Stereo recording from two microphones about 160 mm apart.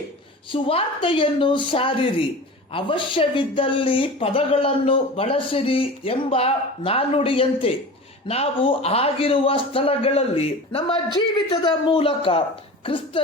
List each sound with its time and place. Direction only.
0.5 s speech: 35° left (ahead or behind)